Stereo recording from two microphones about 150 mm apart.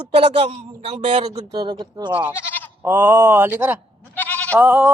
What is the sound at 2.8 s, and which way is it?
Speech, 15° right (ahead or behind).